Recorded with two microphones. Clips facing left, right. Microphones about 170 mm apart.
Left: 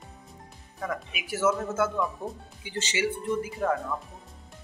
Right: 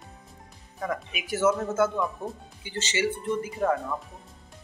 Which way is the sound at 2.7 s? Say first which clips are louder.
Right 1 dB; 10° left (ahead or behind).